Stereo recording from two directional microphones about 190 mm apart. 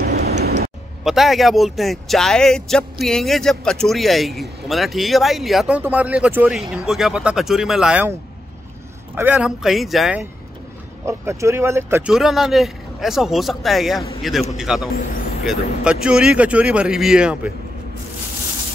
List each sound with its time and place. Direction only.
0.1 s vehicle: 60° right (ahead or behind)
1.0 s speech: centre (ahead or behind)
11.1 s speech: 15° right (ahead or behind)
12.1 s speech: centre (ahead or behind)